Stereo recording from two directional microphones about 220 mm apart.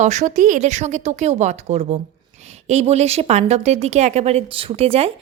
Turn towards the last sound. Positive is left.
turn(degrees=-25)  # may be behind; listen again after turning